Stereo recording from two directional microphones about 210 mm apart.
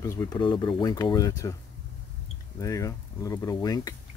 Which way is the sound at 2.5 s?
15° left (ahead or behind).